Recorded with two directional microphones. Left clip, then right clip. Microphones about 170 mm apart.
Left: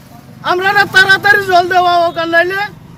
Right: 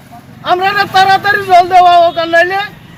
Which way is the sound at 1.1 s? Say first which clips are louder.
Right 1 dB; 30° left (ahead or behind).